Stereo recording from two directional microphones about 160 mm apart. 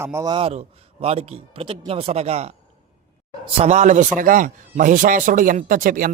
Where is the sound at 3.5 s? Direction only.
45° right (ahead or behind).